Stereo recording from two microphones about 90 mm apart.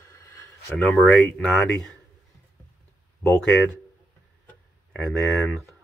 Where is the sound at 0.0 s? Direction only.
35° left (ahead or behind).